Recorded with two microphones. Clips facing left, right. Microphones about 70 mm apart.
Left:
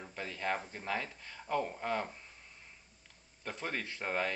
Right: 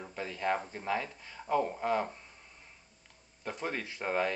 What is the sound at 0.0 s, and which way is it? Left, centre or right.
Speech, centre.